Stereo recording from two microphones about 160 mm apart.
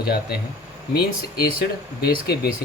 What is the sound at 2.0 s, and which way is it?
Speech, 75° left (ahead or behind).